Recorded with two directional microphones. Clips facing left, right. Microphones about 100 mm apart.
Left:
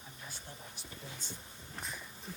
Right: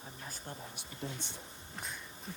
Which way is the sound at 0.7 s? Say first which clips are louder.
Right 5 dB; 65° right (ahead or behind).